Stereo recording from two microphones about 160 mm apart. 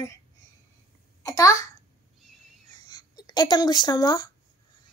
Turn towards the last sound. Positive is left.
turn(degrees=25)  # may be behind; listen again after turning